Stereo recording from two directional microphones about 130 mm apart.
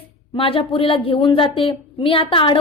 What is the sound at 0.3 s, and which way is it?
A woman's voice, 45° left (ahead or behind).